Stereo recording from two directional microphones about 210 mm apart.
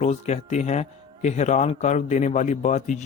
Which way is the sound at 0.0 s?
30° left (ahead or behind).